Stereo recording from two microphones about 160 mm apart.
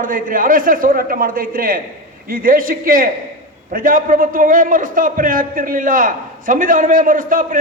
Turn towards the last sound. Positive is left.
turn(degrees=-60)  # may be behind; listen again after turning